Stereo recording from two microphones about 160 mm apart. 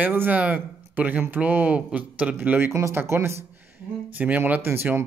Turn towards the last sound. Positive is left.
turn(degrees=-15)  # may be behind; listen again after turning